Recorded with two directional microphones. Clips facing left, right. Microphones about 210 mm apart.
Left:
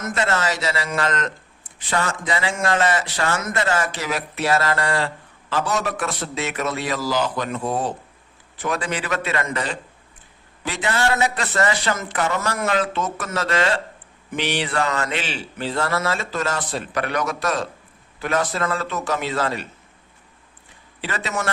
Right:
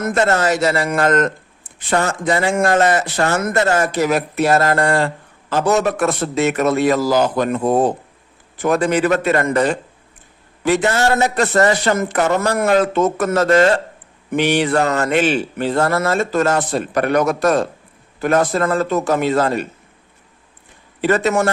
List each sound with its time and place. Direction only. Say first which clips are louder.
0.0 s speech: right 7 dB; 45° right (ahead or behind)
21.0 s speech: right 11 dB; 50° right (ahead or behind)